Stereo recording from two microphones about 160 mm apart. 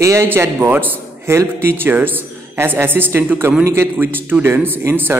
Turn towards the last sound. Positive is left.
turn(degrees=-15)  # may be behind; listen again after turning